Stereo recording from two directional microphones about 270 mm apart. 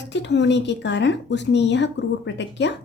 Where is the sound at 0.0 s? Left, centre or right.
Left.